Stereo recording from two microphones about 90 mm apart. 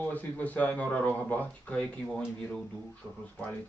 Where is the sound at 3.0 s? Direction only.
Centre (ahead or behind).